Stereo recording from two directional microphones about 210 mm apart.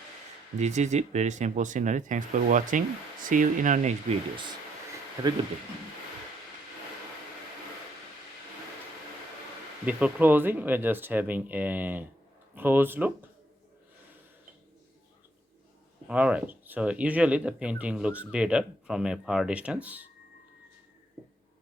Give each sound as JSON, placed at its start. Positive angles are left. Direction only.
{"t": 0.6, "sound": "speech", "side_deg": -35}
{"t": 9.8, "sound": "speech", "side_deg": -10}
{"t": 16.0, "sound": "speech", "side_deg": -5}